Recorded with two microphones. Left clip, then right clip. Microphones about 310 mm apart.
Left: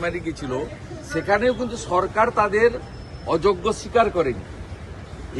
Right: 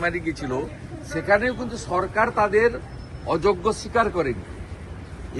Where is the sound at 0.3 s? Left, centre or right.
Centre.